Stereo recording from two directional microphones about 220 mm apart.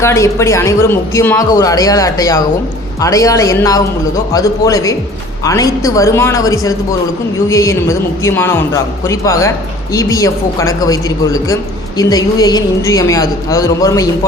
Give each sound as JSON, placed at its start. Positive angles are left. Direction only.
{"t": 0.0, "sound": "speech", "side_deg": 10}